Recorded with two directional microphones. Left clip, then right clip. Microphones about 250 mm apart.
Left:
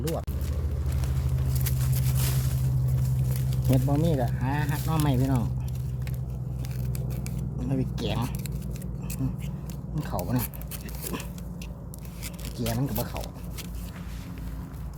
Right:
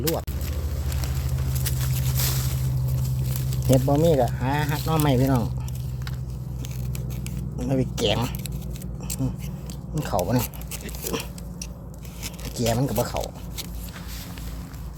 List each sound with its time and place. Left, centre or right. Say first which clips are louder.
0.0 s speech: right 5 dB; right
3.5 s speech: right 7 dB; right
7.6 s speech: right 8 dB; right
9.9 s speech: right 8 dB; right
12.5 s speech: right 8 dB; right